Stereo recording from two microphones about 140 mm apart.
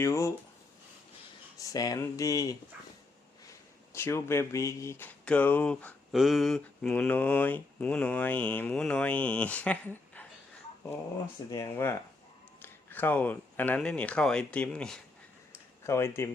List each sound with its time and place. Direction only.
0.0 s speech: 20° left (ahead or behind)
1.5 s speech: 25° left (ahead or behind)
3.9 s speech: 20° left (ahead or behind)
6.1 s speech: centre (ahead or behind)
11.5 s speech: 20° left (ahead or behind)
15.8 s speech: 20° left (ahead or behind)